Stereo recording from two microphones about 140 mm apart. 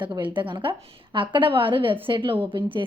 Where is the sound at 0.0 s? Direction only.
35° right (ahead or behind).